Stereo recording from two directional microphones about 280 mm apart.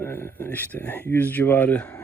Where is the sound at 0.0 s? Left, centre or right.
Centre.